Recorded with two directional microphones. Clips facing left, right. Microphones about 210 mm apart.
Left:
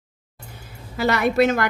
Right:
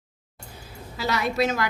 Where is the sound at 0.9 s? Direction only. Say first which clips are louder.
Left 6 dB; 55° left (ahead or behind).